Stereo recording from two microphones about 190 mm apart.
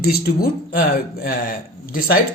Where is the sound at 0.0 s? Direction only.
55° left (ahead or behind).